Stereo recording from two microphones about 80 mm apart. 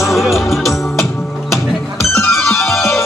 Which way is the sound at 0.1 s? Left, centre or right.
Centre.